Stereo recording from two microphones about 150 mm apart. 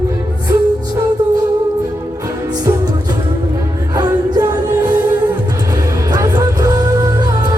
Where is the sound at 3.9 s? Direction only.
30° right (ahead or behind).